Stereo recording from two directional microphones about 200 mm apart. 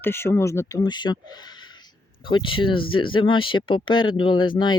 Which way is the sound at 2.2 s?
25° left (ahead or behind).